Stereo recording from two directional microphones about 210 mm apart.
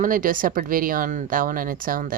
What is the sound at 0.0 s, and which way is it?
Speech, 40° right (ahead or behind).